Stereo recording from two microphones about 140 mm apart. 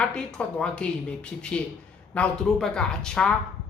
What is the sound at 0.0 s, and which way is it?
Speech, 5° left (ahead or behind).